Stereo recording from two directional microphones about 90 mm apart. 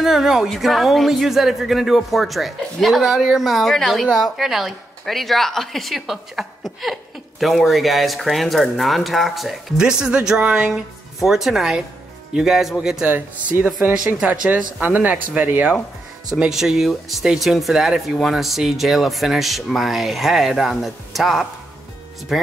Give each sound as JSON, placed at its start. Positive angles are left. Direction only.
{"t": 0.0, "sound": "speech", "side_deg": -5}
{"t": 13.0, "sound": "speech", "side_deg": -20}
{"t": 13.9, "sound": "speech", "side_deg": -10}
{"t": 16.3, "sound": "speech", "side_deg": -5}